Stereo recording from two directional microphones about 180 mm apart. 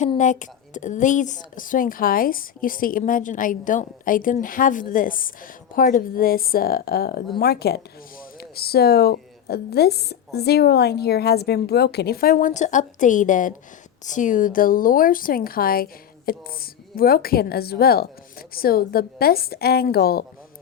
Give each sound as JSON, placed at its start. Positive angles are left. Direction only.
{"t": 0.2, "sound": "a woman's voice", "side_deg": 45}